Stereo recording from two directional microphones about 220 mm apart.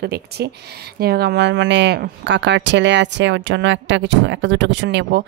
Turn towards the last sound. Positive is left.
turn(degrees=-50)  # may be behind; listen again after turning